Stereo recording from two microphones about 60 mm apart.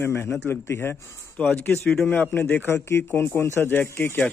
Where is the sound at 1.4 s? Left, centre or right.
Left.